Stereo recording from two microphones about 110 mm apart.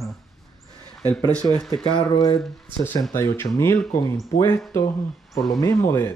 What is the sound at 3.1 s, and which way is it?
Speech, 25° left (ahead or behind).